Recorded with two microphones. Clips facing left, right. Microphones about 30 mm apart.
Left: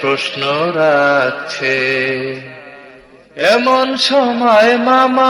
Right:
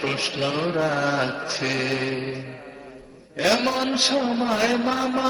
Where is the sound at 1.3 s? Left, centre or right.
Left.